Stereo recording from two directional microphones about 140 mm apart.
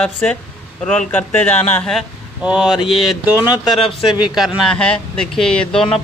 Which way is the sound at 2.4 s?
5° right (ahead or behind).